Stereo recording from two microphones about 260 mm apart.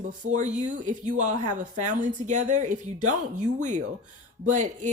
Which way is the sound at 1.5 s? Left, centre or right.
Right.